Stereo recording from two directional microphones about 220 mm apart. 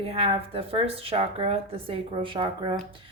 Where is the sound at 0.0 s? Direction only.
25° right (ahead or behind).